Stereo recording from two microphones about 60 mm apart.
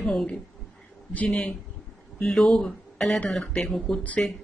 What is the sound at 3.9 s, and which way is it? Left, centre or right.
Speech, left.